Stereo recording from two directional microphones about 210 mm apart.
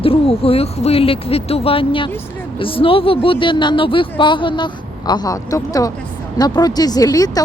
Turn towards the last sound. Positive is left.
turn(degrees=15)  # may be behind; listen again after turning